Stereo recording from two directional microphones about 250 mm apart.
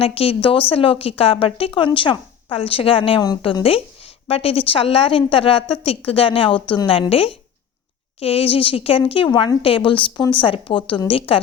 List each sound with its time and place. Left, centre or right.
0.0 s a woman's voice: left